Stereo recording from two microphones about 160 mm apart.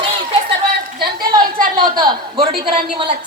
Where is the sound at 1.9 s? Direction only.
25° right (ahead or behind).